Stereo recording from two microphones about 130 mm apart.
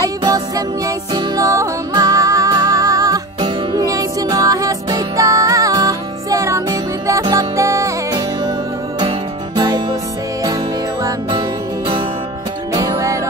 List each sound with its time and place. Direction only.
0.0 s music: 30° right (ahead or behind)